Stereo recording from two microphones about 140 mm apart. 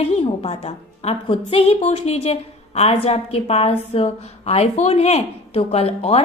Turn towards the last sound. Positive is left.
turn(degrees=45)  # may be behind; listen again after turning